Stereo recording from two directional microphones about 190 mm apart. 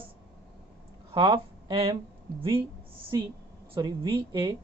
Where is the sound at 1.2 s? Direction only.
20° right (ahead or behind).